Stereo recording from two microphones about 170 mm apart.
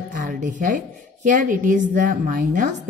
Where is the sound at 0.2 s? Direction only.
50° right (ahead or behind).